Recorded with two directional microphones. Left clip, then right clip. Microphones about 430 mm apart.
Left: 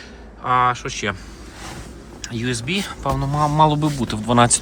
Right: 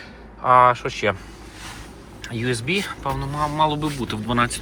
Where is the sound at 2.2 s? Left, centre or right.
Centre.